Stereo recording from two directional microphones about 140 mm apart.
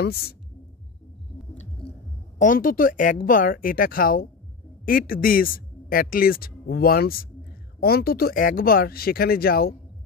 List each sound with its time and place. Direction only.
0.1 s a man's voice: 90° left
1.9 s a woman's voice: 65° left (ahead or behind); by 9.8 s 90° left